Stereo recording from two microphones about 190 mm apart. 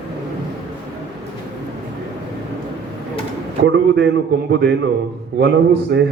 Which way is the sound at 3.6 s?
75° right (ahead or behind).